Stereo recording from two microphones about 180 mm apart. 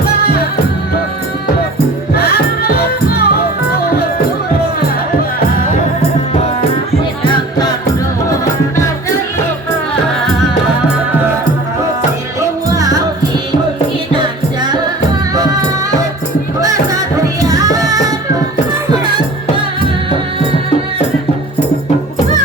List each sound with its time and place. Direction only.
2.1 s music: 60° left (ahead or behind)
11.1 s music: 10° right (ahead or behind)
12.4 s music: 20° right (ahead or behind)
16.6 s music: 20° right (ahead or behind)